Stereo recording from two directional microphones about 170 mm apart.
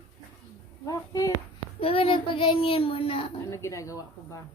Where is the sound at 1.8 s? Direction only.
35° left (ahead or behind).